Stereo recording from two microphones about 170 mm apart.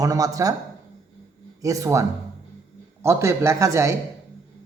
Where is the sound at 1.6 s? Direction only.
20° right (ahead or behind).